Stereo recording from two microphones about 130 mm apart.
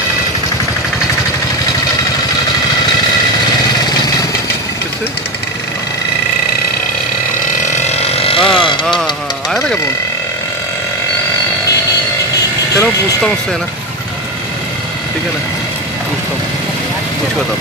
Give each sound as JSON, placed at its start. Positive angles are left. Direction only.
{"t": 7.8, "sound": "vehicle", "side_deg": 50}
{"t": 8.8, "sound": "engine", "side_deg": 5}
{"t": 12.7, "sound": "speech", "side_deg": 5}